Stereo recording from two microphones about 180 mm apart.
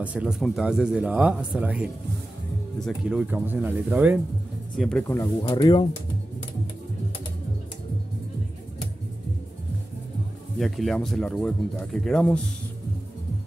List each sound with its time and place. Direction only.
0.0 s speech: 5° right (ahead or behind)
3.1 s speech: 5° right (ahead or behind)
4.7 s speech: 5° left (ahead or behind)
5.5 s speech: 25° left (ahead or behind)
10.6 s speech: centre (ahead or behind)